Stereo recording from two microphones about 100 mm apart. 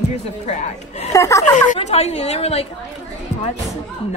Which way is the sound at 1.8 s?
90° left.